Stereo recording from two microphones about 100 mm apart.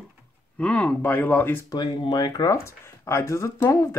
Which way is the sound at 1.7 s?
45° left (ahead or behind).